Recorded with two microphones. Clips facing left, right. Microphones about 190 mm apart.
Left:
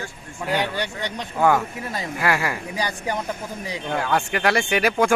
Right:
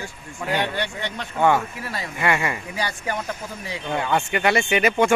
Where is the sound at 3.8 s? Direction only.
Centre (ahead or behind).